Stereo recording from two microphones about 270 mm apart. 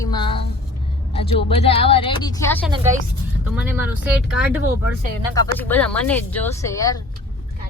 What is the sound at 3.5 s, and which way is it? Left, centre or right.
Speech, centre.